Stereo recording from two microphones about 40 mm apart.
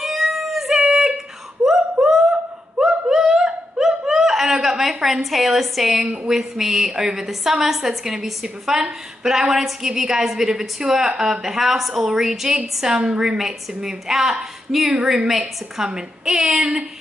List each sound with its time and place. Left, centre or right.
0.0 s a sound: centre
2.9 s laughter: centre
4.7 s a woman's voice: centre
12.5 s a woman's voice: centre